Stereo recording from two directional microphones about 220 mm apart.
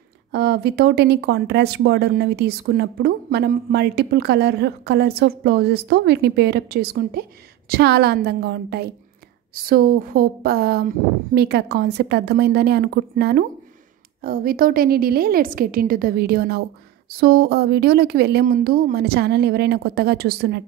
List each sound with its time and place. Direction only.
0.3 s a woman's voice: 50° right (ahead or behind)